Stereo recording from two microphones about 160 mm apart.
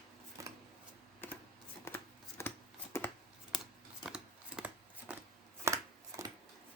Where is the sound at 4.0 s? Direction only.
5° right (ahead or behind).